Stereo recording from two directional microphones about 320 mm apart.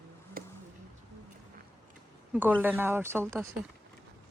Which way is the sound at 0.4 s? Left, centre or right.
Right.